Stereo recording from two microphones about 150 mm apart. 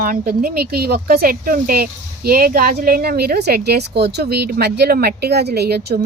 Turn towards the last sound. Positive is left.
turn(degrees=-90)